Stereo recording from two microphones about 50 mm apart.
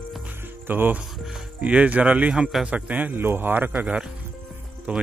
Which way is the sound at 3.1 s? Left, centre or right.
Right.